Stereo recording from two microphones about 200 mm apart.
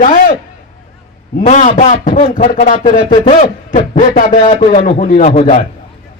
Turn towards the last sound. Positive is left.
turn(degrees=35)  # may be behind; listen again after turning